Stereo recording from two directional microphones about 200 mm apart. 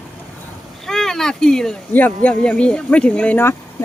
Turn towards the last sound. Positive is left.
turn(degrees=10)  # may be behind; listen again after turning